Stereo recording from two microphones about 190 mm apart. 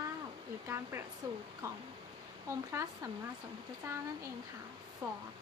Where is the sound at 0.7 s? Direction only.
15° right (ahead or behind).